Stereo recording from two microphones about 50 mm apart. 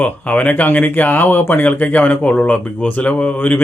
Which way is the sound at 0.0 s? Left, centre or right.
Left.